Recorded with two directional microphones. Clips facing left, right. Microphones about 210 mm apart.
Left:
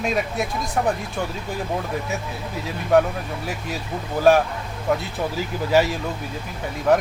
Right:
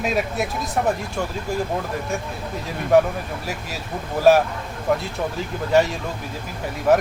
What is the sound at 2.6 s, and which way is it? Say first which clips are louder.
Speech: right 1 dB; centre (ahead or behind).